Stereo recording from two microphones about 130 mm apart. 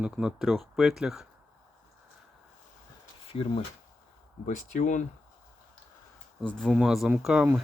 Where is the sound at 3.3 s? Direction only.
45° left (ahead or behind).